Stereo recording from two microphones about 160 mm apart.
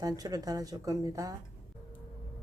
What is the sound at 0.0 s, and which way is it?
Speech, 25° right (ahead or behind).